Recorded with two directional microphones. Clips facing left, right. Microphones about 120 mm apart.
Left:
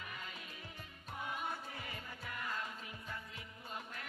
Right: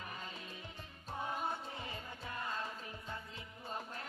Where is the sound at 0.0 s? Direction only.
35° right (ahead or behind).